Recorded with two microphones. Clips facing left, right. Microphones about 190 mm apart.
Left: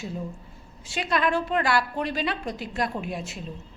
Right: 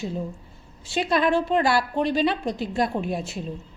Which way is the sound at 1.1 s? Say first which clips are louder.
Right 3 dB; 30° right (ahead or behind).